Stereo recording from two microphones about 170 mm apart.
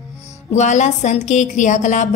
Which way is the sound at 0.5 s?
45° left (ahead or behind).